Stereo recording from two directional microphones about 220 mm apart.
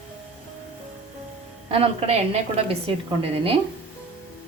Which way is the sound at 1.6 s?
25° right (ahead or behind).